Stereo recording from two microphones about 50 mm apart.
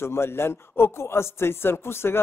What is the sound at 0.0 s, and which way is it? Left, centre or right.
Speech, left.